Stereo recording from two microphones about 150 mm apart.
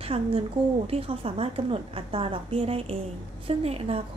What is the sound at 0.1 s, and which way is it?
A woman's voice, 40° right (ahead or behind).